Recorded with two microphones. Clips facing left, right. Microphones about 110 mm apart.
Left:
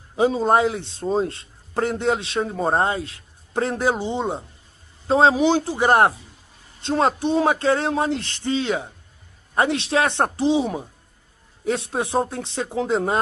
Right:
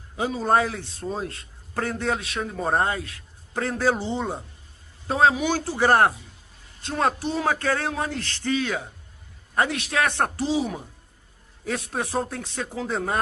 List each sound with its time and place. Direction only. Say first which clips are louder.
0.1 s speech: left 4 dB; 25° left (ahead or behind)